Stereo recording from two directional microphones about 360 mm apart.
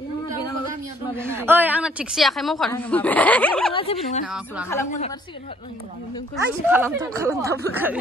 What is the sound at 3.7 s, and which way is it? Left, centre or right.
Speech, centre.